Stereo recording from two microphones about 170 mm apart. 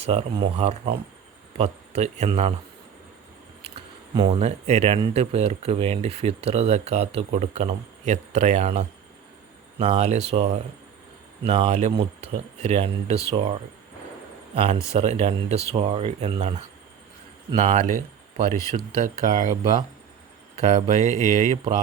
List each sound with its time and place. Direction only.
0.0 s speech: 35° right (ahead or behind)
4.3 s speech: 40° right (ahead or behind)
14.5 s a man's voice: 35° right (ahead or behind)
18.5 s speech: 20° left (ahead or behind)
18.9 s speech: 50° right (ahead or behind)
20.6 s speech: 40° right (ahead or behind)